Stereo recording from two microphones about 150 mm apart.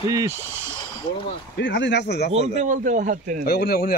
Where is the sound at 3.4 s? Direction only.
90° left.